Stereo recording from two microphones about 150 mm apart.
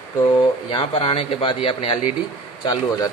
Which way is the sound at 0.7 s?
35° left (ahead or behind).